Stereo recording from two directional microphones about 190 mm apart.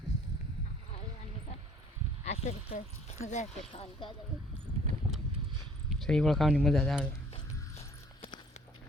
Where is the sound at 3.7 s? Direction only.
25° left (ahead or behind).